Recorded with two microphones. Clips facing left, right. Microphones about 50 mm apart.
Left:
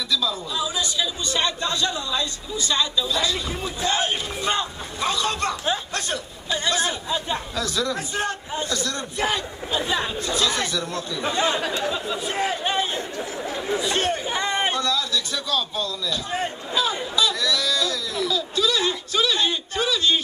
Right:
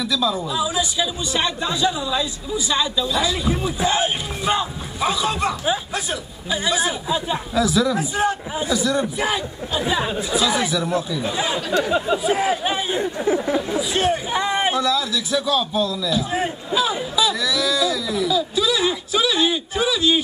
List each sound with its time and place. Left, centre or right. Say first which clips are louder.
0.1 s speech: right 2 dB; centre
13.2 s speech: right 9 dB; right
13.7 s speech: right 3 dB; centre